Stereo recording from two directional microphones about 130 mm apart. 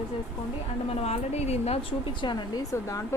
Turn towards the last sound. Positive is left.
turn(degrees=25)  # may be behind; listen again after turning